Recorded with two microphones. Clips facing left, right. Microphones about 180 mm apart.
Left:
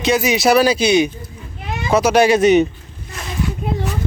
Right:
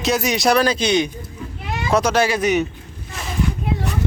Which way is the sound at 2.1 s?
20° left (ahead or behind).